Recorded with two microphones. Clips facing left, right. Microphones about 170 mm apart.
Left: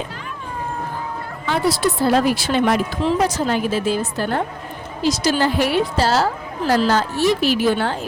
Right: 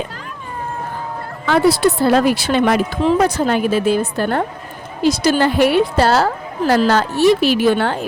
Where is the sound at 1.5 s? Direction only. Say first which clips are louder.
Right 6 dB; 65° right (ahead or behind).